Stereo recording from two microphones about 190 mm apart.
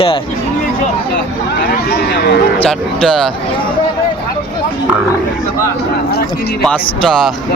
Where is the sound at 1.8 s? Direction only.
60° left (ahead or behind).